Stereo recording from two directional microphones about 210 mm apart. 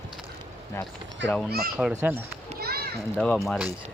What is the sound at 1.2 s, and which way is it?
Speech, 5° left (ahead or behind).